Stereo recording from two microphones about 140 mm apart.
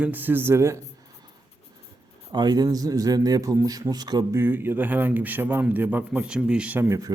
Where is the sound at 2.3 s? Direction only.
30° right (ahead or behind).